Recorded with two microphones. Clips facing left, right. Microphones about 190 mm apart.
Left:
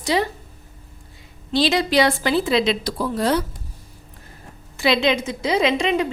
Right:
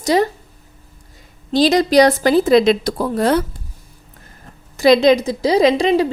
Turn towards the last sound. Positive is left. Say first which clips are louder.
# right 6 dB
turn(degrees=-35)  # may be behind; listen again after turning